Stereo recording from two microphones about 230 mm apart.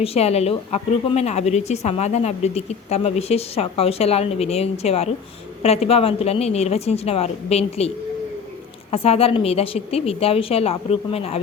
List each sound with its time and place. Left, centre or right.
0.0 s a woman's voice: left
8.9 s a woman's voice: left